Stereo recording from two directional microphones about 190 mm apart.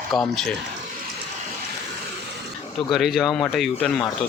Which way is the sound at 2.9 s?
Centre (ahead or behind).